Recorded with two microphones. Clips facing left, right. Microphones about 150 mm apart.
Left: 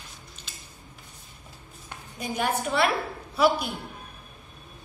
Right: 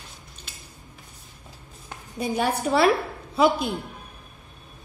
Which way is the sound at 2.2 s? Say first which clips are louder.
Right 3 dB; 35° right (ahead or behind).